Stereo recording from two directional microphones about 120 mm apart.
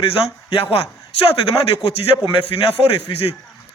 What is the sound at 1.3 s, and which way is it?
A man's voice, 50° left (ahead or behind).